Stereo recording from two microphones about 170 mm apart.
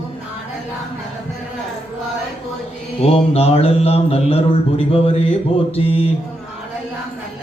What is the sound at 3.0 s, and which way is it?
Speech, 35° left (ahead or behind).